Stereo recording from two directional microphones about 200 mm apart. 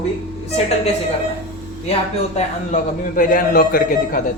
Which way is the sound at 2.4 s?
40° left (ahead or behind).